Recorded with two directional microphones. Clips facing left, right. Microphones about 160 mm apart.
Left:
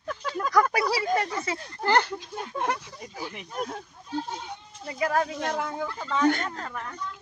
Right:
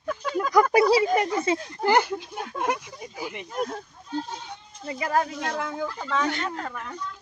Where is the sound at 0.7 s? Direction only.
20° right (ahead or behind).